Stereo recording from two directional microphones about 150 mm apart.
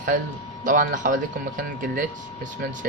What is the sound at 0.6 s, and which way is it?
Speech, 60° right (ahead or behind).